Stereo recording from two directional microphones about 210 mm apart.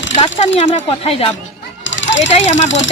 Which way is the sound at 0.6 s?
35° left (ahead or behind).